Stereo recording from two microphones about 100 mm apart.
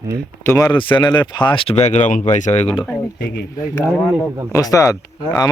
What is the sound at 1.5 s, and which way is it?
Speech, 65° left (ahead or behind).